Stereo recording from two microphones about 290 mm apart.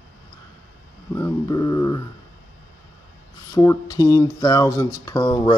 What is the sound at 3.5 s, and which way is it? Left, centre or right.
Speech, centre.